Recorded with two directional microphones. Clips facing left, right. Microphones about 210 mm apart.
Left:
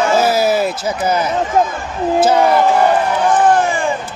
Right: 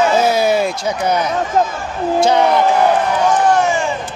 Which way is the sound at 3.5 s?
55° left (ahead or behind).